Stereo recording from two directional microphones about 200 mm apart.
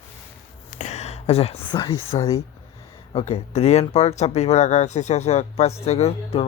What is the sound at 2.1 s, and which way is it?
Speech, 30° left (ahead or behind).